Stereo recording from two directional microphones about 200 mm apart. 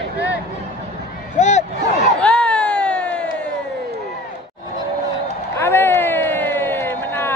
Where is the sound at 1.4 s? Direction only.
35° left (ahead or behind).